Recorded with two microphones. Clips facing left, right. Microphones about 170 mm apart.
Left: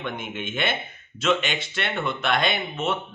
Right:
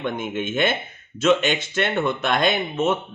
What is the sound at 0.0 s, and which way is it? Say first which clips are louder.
Speech: right 6 dB; 45° right (ahead or behind).